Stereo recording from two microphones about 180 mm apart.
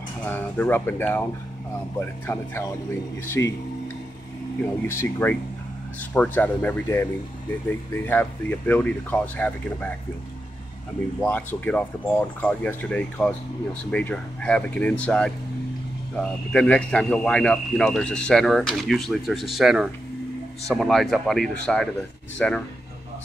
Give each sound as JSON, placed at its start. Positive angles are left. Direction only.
{"t": 0.3, "sound": "speech", "side_deg": 10}
{"t": 4.8, "sound": "speech", "side_deg": 10}
{"t": 11.1, "sound": "speech", "side_deg": 10}